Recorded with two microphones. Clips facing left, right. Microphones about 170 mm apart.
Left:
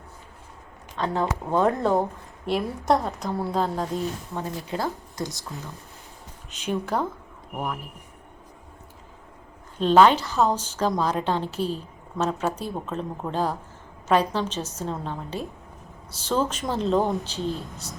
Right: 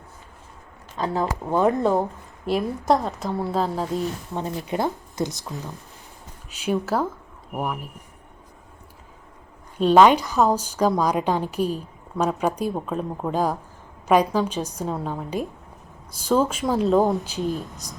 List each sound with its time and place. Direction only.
0.9 s a woman's voice: 5° right (ahead or behind)
4.4 s speech: 20° right (ahead or behind)
6.7 s a woman's voice: 5° right (ahead or behind)
9.7 s a woman's voice: 10° right (ahead or behind)